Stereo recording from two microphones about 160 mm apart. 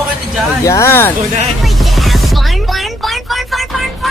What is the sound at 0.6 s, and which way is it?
Speech, 20° left (ahead or behind).